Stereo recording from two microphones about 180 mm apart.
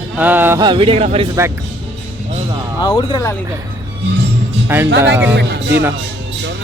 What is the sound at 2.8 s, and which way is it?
Speech, 25° left (ahead or behind).